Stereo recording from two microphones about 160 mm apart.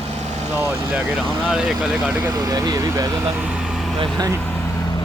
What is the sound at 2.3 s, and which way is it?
Speech, 25° right (ahead or behind).